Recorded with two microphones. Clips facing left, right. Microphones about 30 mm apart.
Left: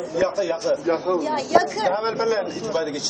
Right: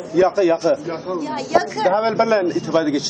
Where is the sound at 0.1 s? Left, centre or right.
Centre.